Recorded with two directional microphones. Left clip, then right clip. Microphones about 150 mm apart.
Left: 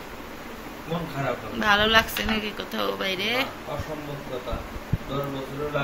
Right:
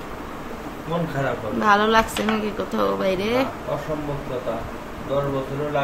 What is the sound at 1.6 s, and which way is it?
Speech, 30° right (ahead or behind).